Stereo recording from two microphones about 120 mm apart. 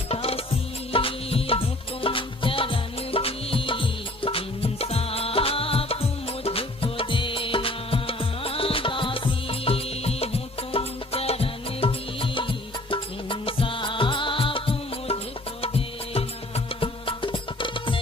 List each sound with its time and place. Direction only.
0.1 s music: 55° left (ahead or behind)